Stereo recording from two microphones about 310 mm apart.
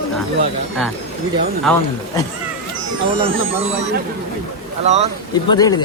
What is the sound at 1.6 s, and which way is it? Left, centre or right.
Speech, centre.